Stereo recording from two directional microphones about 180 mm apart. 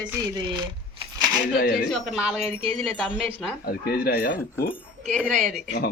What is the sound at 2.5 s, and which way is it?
Speech, 30° right (ahead or behind).